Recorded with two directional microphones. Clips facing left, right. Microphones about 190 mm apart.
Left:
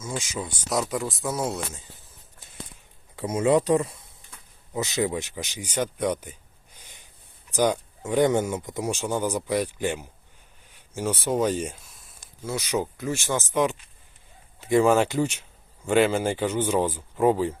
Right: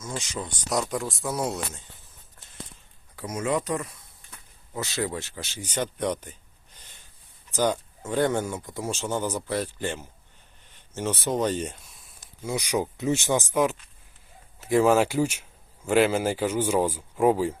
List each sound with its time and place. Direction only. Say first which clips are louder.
0.0 s speech: left 2 dB; 10° left (ahead or behind)
3.2 s speech: left 6 dB; 30° left (ahead or behind); by 6.3 s 10° left (ahead or behind)
6.7 s snort: left 2 dB; 15° left (ahead or behind)
7.5 s speech: left 2 dB; 15° left (ahead or behind)
10.7 s a sound: left 1 dB; 10° left (ahead or behind)
12.5 s speech: even; 15° right (ahead or behind)